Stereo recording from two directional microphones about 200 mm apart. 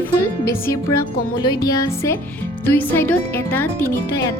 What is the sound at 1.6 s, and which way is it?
Speech, 15° left (ahead or behind).